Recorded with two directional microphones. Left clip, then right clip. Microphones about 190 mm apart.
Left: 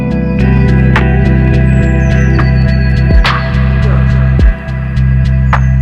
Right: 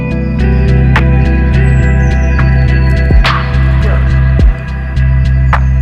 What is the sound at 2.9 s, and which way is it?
Music, centre (ahead or behind).